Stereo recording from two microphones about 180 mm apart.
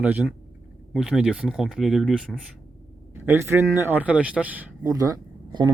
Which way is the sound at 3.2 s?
15° right (ahead or behind).